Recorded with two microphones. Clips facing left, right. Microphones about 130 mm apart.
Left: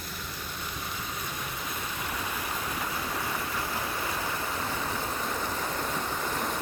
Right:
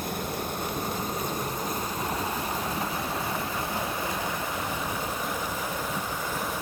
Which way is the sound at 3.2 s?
25° right (ahead or behind).